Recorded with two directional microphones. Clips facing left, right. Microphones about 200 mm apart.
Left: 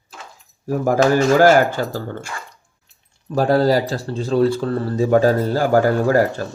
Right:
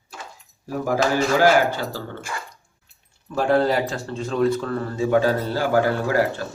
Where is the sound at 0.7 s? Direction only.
45° left (ahead or behind).